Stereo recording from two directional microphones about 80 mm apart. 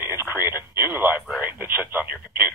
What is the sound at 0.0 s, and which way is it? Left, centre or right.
Radio, right.